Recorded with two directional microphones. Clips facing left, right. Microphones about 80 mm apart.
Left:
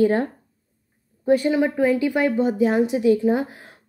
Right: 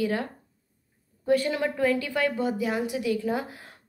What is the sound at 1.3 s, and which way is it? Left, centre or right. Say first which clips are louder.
A woman's voice: left 6 dB; left.